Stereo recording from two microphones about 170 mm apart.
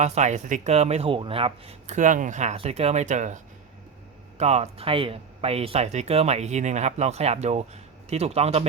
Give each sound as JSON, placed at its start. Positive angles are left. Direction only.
{"t": 0.0, "sound": "speech", "side_deg": -40}